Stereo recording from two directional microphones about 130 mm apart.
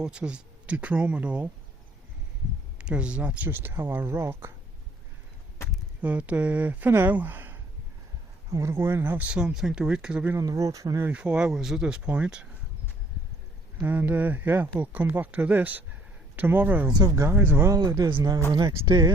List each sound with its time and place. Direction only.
0.0 s speech: 5° right (ahead or behind)
2.7 s speech: 10° right (ahead or behind)
6.0 s speech: 10° right (ahead or behind)
8.4 s speech: 25° right (ahead or behind); by 10.3 s 10° right (ahead or behind)
10.3 s speech: 25° right (ahead or behind)
11.1 s speech: 10° right (ahead or behind)
13.8 s speech: 15° right (ahead or behind)
16.9 s speech: 30° right (ahead or behind)
17.3 s speech: 15° right (ahead or behind)
17.7 s speech: 30° right (ahead or behind)